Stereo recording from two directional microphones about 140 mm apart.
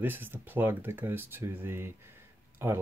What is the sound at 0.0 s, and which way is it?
Speech, 15° right (ahead or behind).